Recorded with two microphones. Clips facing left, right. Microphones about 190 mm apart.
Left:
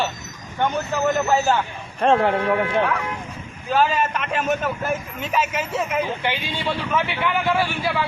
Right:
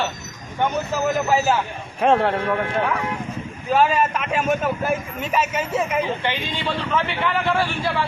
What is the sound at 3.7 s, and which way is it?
A man's voice, 5° right (ahead or behind).